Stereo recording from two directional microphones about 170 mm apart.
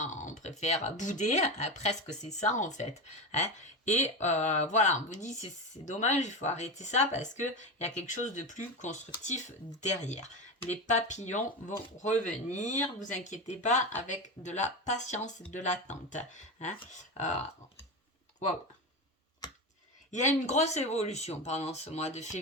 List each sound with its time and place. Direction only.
0.0 s speech: 50° left (ahead or behind)
20.1 s speech: 45° left (ahead or behind)